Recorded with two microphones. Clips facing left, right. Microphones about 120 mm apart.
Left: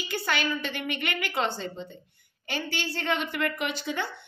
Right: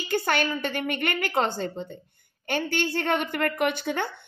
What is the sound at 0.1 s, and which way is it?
A woman's voice, 45° right (ahead or behind).